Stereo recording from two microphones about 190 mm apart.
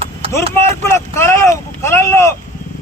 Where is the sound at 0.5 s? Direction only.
15° left (ahead or behind).